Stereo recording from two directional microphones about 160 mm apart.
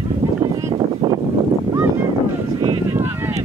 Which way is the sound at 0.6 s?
25° right (ahead or behind).